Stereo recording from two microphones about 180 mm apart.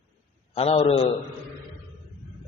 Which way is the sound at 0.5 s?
35° left (ahead or behind).